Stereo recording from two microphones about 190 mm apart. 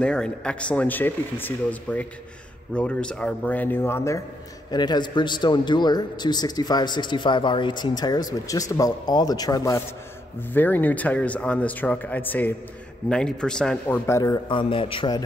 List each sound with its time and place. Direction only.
0.0 s a man's voice: 5° left (ahead or behind)
14.5 s a man's voice: 25° left (ahead or behind)